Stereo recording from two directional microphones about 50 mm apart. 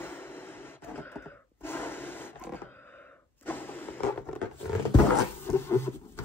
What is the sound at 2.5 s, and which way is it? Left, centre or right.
Vehicle, left.